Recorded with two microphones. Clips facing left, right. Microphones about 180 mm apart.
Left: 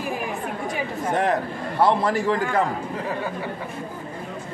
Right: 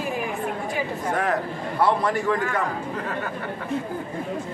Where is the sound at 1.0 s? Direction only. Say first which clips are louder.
Left 3 dB; 25° left (ahead or behind).